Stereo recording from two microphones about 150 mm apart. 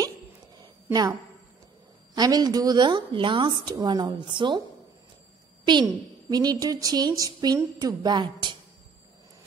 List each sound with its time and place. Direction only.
2.1 s a woman's voice: 25° right (ahead or behind)
5.7 s a woman's voice: 30° right (ahead or behind)